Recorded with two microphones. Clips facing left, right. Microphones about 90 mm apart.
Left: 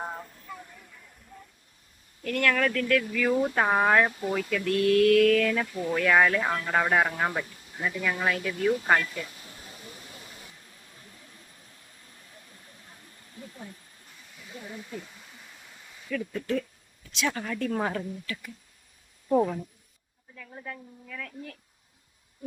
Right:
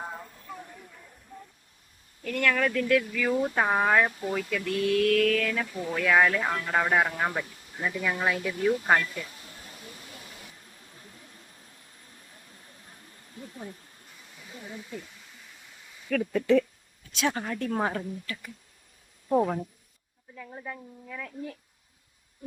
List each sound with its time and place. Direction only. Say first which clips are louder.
2.2 s speech: left 1 dB; centre (ahead or behind)
2.7 s a woman's voice: right 1 dB; 15° right (ahead or behind)
3.0 s speech: left 2 dB; centre (ahead or behind)
13.4 s a sound: right 2 dB; 5° right (ahead or behind)
14.5 s speech: left 1 dB; 5° left (ahead or behind)
16.0 s speech: right 6 dB; 70° right (ahead or behind)
17.2 s a woman's voice: right 1 dB; 30° right (ahead or behind)
20.3 s a woman's voice: right 2 dB; 15° right (ahead or behind)